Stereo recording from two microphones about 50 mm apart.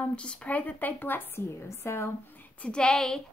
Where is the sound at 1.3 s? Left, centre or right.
Left.